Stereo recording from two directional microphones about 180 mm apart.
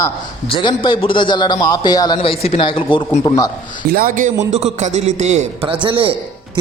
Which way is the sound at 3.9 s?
55° right (ahead or behind).